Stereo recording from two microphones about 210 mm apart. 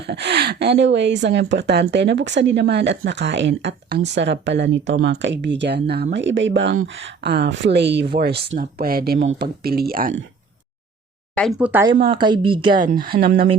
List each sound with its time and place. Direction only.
0.0 s speech: 50° right (ahead or behind)
11.3 s speech: centre (ahead or behind)
12.0 s a woman's voice: 20° right (ahead or behind)
13.1 s speech: 40° right (ahead or behind)